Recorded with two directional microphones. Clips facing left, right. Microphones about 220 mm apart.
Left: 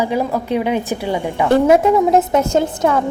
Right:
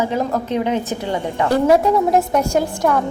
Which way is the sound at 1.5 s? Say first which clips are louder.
Left 3 dB; 20° left (ahead or behind).